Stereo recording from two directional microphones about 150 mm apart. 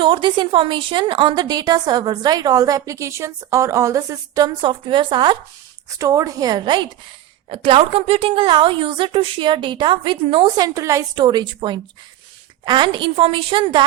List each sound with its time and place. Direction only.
0.0 s a woman's voice: 35° right (ahead or behind)
10.8 s a woman's voice: 20° right (ahead or behind)